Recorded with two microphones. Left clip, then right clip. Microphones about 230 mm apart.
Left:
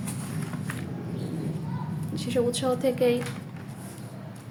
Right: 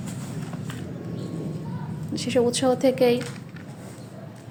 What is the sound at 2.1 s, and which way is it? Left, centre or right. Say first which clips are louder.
A woman's voice: right 4 dB; right.